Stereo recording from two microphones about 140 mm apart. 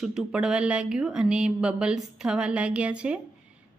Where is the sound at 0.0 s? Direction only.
5° right (ahead or behind).